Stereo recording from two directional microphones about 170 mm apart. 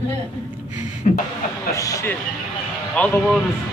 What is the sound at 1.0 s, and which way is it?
Speech, 45° left (ahead or behind).